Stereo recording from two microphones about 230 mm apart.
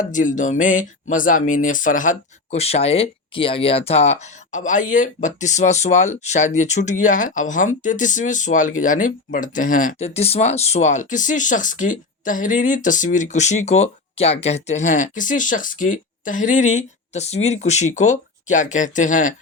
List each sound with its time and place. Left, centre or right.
0.0 s speech: left